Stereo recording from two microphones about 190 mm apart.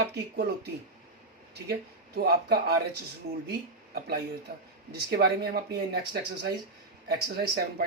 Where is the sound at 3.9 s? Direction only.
55° right (ahead or behind).